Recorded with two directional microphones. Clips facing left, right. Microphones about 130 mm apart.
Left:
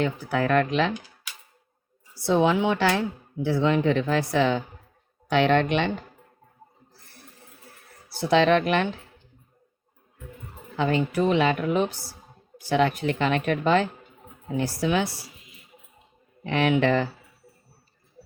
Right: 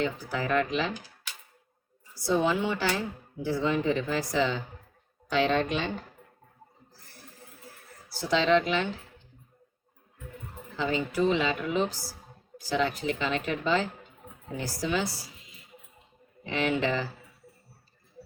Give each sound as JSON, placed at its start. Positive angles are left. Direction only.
{"t": 0.0, "sound": "a woman's voice", "side_deg": 60}
{"t": 2.1, "sound": "speech", "side_deg": 70}
{"t": 8.3, "sound": "a woman's voice", "side_deg": 65}
{"t": 10.8, "sound": "a woman's voice", "side_deg": 60}
{"t": 16.4, "sound": "a woman's voice", "side_deg": 65}